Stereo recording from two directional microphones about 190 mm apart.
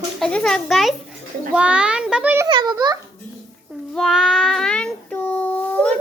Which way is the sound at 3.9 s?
Centre (ahead or behind).